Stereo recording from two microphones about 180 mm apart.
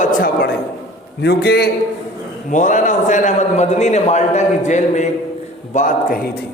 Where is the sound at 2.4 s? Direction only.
45° left (ahead or behind).